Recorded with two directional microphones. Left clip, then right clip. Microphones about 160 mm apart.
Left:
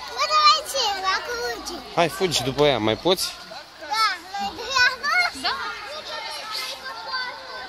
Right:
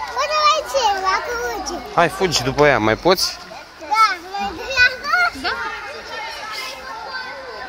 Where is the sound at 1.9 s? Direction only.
30° left (ahead or behind); by 3.3 s 15° left (ahead or behind).